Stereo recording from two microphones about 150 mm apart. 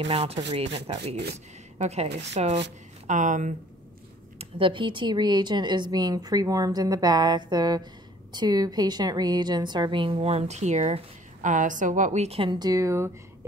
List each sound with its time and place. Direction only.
0.1 s a woman's voice: 40° right (ahead or behind); by 3.5 s 55° right (ahead or behind)
4.4 s a woman's voice: 35° right (ahead or behind); by 13.5 s 20° right (ahead or behind)